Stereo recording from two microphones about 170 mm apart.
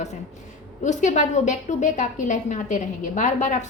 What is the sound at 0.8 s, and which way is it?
A woman's voice, 45° left (ahead or behind).